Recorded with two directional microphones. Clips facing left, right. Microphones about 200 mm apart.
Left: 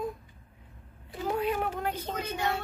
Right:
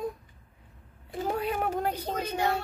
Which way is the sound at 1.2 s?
40° right (ahead or behind).